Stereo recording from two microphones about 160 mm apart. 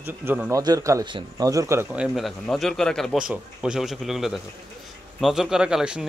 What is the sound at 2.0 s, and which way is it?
Speech, centre (ahead or behind).